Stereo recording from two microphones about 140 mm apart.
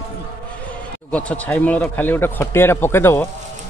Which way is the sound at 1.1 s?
10° left (ahead or behind).